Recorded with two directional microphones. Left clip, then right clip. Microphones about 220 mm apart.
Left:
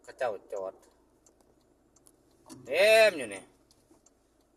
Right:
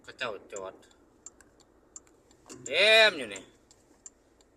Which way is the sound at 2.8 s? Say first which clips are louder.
Even; 10° right (ahead or behind).